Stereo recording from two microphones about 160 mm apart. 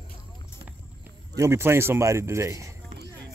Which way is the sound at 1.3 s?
15° right (ahead or behind).